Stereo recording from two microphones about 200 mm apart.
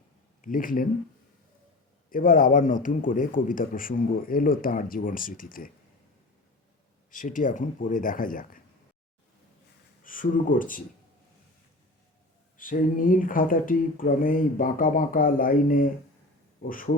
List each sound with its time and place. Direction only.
0.4 s a man's voice: 40° left (ahead or behind)
2.0 s a man's voice: 45° left (ahead or behind)
7.1 s speech: 40° left (ahead or behind)
10.0 s a man's voice: 45° left (ahead or behind)
12.5 s a man's voice: 45° left (ahead or behind)